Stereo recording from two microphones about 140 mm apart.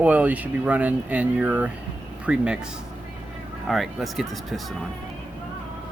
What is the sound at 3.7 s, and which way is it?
Speech, centre (ahead or behind).